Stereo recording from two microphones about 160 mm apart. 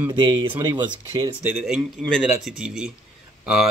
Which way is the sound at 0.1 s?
30° right (ahead or behind).